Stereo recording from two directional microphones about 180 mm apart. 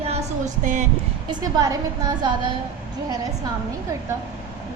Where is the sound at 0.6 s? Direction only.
40° right (ahead or behind).